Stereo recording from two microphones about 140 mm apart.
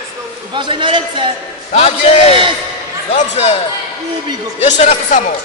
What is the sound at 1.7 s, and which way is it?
A man's voice, 50° left (ahead or behind).